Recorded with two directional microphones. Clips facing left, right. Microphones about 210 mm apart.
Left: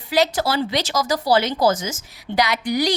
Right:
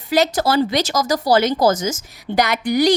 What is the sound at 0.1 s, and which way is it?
Speech, 45° right (ahead or behind).